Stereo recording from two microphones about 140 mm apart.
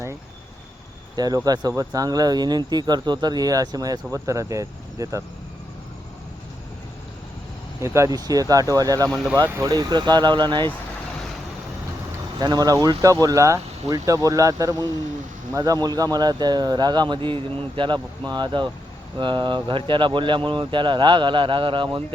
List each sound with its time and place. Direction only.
1.1 s speech: 30° right (ahead or behind)
7.8 s speech: 20° right (ahead or behind)
12.4 s speech: 30° right (ahead or behind)